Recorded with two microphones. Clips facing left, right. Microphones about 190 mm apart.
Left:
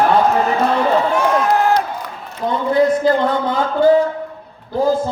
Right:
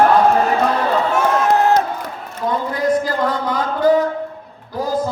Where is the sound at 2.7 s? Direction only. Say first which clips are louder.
Left 7 dB; 25° left (ahead or behind).